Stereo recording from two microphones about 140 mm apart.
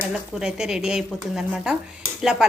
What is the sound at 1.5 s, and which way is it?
Stir, 10° right (ahead or behind).